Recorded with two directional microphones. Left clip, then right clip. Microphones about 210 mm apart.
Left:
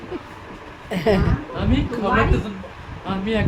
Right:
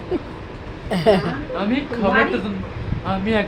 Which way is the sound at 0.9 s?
5° left (ahead or behind).